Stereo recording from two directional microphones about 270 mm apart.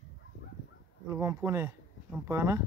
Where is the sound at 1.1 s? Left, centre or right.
Centre.